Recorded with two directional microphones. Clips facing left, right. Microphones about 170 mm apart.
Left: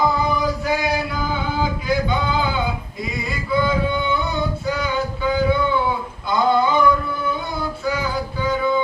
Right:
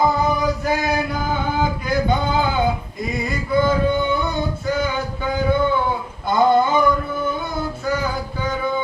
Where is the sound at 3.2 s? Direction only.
50° right (ahead or behind).